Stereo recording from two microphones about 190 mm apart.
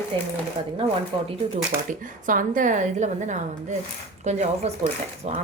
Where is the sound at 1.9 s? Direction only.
45° right (ahead or behind).